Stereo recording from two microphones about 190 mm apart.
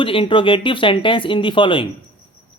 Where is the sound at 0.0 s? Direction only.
25° left (ahead or behind).